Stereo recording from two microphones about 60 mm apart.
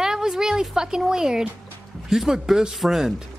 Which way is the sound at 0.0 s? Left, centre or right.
Centre.